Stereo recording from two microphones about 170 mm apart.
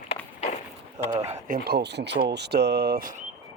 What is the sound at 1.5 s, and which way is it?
Speech, 65° right (ahead or behind).